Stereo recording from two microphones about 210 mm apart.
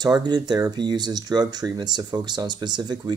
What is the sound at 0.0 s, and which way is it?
Speech, 20° right (ahead or behind).